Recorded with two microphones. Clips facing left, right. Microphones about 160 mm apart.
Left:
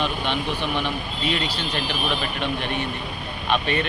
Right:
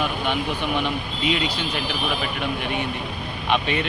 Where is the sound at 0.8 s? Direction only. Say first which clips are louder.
Right 1 dB; 15° right (ahead or behind).